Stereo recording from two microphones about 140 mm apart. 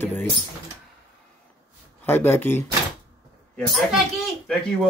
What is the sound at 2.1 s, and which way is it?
Speech, 15° left (ahead or behind).